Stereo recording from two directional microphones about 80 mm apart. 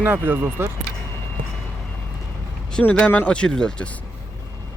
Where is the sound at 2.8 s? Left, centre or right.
Centre.